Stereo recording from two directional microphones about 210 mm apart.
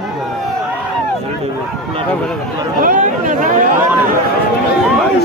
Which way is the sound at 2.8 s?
40° right (ahead or behind).